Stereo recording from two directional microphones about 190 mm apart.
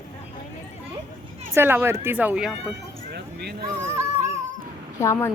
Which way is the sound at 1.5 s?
10° right (ahead or behind).